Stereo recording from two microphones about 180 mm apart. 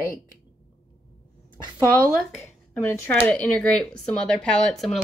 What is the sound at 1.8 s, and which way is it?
Speech, 15° left (ahead or behind).